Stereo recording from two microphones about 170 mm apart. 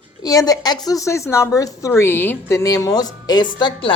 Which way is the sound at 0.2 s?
20° left (ahead or behind).